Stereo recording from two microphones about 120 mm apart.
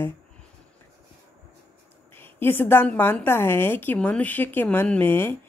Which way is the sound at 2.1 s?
20° left (ahead or behind).